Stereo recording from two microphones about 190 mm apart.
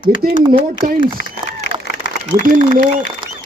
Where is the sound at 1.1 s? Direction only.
65° left (ahead or behind).